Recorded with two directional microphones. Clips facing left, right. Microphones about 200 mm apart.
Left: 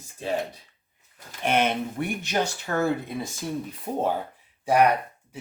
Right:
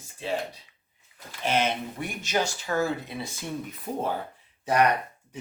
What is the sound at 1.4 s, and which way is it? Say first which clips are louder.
Speech: left 3 dB; 55° left (ahead or behind).